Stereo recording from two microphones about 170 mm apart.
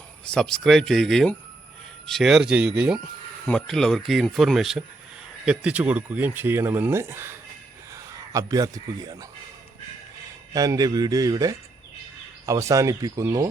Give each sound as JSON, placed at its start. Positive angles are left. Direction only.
{"t": 0.3, "sound": "speech", "side_deg": 5}
{"t": 10.5, "sound": "speech", "side_deg": -20}